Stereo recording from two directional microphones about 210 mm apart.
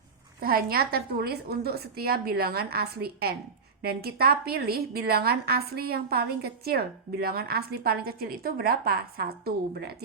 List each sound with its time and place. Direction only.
0.4 s a woman's voice: 45° right (ahead or behind)